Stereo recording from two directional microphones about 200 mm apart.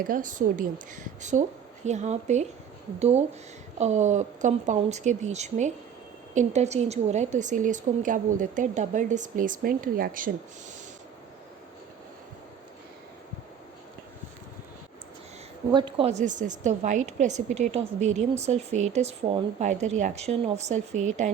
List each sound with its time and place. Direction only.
0.0 s a woman's voice: 45° right (ahead or behind)
15.7 s a woman's voice: 30° right (ahead or behind)